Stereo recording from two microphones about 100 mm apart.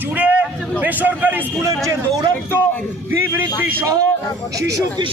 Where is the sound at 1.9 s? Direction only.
40° right (ahead or behind).